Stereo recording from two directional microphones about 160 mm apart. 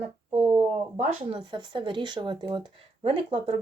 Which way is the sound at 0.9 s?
40° right (ahead or behind).